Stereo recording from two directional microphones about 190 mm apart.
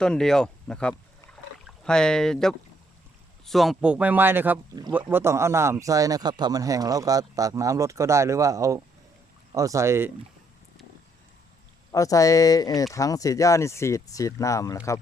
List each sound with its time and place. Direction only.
0.0 s speech: 5° left (ahead or behind); by 10.1 s 15° right (ahead or behind)
11.9 s speech: 15° left (ahead or behind)